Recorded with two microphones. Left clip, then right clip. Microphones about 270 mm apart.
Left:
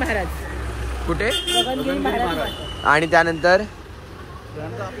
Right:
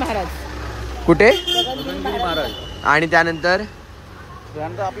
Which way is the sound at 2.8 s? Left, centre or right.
Centre.